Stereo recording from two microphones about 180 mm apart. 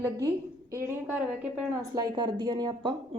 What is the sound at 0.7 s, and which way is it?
A woman's voice, 15° right (ahead or behind).